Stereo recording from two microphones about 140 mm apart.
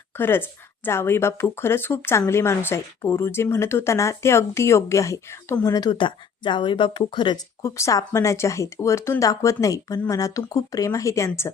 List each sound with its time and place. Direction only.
0.2 s a woman's voice: 15° left (ahead or behind); by 7.3 s 35° left (ahead or behind)
7.6 s speech: 20° left (ahead or behind)